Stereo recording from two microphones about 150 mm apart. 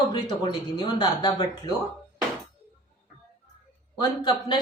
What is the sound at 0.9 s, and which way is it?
Speech, 30° left (ahead or behind).